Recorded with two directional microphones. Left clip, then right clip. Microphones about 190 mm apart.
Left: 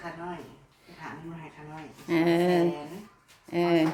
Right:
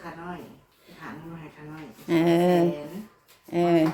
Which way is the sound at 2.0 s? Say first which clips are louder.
Right 3 dB; 10° right (ahead or behind).